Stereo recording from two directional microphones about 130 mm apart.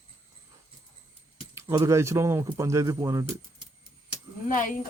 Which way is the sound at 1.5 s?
20° right (ahead or behind).